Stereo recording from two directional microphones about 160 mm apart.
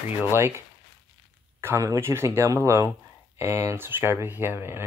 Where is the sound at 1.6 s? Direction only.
20° right (ahead or behind).